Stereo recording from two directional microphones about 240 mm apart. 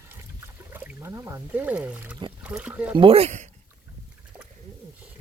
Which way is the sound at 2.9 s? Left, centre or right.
Right.